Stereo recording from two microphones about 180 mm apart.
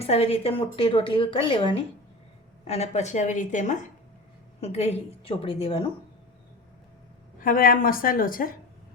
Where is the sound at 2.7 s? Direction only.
40° left (ahead or behind).